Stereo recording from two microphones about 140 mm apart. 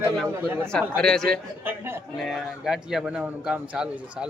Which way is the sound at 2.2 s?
Centre (ahead or behind).